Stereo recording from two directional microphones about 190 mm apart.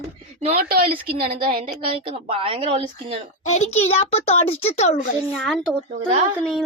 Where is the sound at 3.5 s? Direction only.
35° left (ahead or behind).